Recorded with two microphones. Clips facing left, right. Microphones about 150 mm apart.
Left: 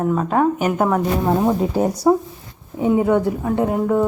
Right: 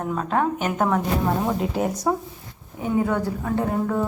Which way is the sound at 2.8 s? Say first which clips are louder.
Left 6 dB; 20° left (ahead or behind).